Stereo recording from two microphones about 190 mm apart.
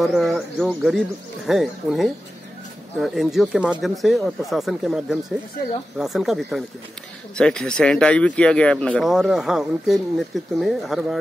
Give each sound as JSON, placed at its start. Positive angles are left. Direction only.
{"t": 0.0, "sound": "speech", "side_deg": 0}